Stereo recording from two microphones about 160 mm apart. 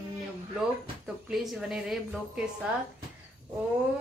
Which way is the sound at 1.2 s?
Centre (ahead or behind).